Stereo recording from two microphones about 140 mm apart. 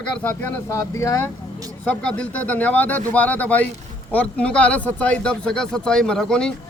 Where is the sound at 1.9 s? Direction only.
5° left (ahead or behind).